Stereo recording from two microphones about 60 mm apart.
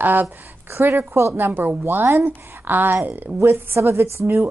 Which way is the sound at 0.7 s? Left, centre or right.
Right.